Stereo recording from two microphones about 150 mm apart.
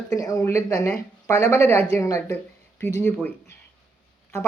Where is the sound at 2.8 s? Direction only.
10° left (ahead or behind).